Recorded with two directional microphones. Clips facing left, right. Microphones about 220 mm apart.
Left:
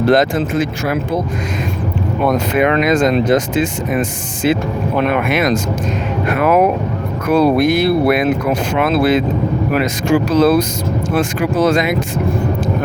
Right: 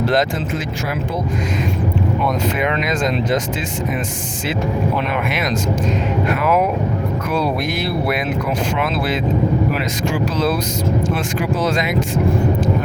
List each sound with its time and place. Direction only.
0.1 s speech: 55° left (ahead or behind)
2.2 s speech: 60° left (ahead or behind)
4.9 s speech: 50° left (ahead or behind)